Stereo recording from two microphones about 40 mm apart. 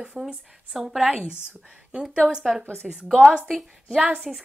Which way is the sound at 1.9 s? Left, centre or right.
Right.